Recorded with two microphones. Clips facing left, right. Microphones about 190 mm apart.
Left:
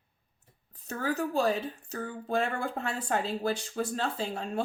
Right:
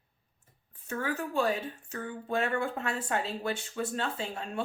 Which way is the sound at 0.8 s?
40° left (ahead or behind).